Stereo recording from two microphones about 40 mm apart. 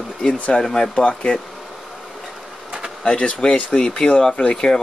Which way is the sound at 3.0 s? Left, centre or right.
Centre.